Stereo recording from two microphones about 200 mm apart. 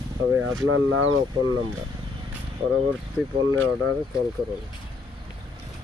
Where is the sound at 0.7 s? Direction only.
90° right.